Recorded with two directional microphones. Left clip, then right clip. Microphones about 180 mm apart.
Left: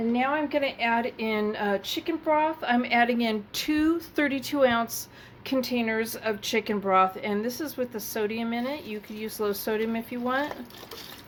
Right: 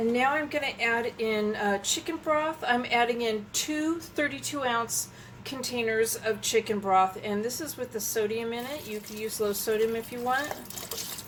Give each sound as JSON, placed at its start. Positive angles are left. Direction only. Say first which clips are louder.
{"t": 0.1, "sound": "a woman's voice", "louder": "even", "side_deg": 30}